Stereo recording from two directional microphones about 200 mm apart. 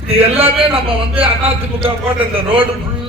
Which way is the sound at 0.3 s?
25° right (ahead or behind).